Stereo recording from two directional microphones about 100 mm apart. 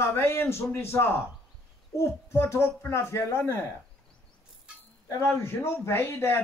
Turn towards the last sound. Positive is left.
turn(degrees=25)  # may be behind; listen again after turning